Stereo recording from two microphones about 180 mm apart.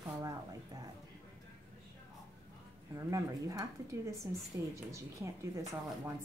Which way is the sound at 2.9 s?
20° right (ahead or behind).